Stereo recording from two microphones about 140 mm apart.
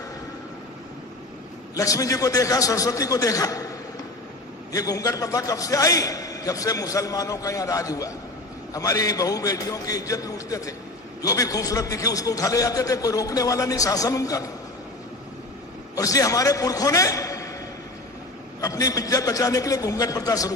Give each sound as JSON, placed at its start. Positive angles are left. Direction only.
{"t": 1.7, "sound": "a man's voice", "side_deg": 25}
{"t": 4.7, "sound": "a man's voice", "side_deg": 25}
{"t": 16.0, "sound": "a man's voice", "side_deg": 25}
{"t": 18.6, "sound": "a man's voice", "side_deg": 25}